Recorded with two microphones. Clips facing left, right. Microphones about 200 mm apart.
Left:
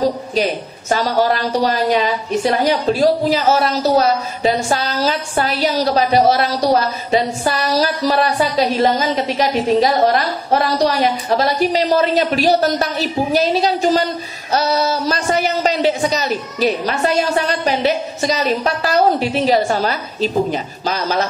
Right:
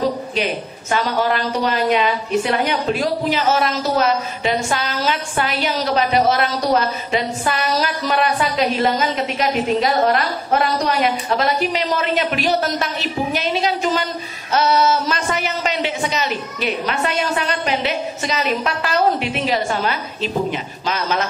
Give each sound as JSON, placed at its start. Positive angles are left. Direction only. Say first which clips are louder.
{"t": 0.4, "sound": "a woman's voice", "louder": "left 3 dB", "side_deg": 40}